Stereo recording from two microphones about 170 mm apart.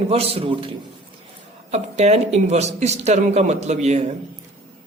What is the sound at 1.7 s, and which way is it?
Speech, 40° right (ahead or behind).